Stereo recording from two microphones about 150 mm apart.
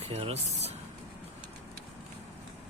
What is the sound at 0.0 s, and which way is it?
Speech, 45° right (ahead or behind).